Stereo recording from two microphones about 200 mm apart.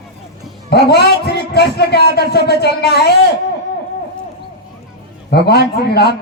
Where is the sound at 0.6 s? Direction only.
55° left (ahead or behind).